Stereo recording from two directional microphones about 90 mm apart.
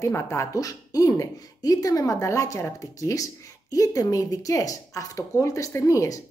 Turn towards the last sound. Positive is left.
turn(degrees=40)  # may be behind; listen again after turning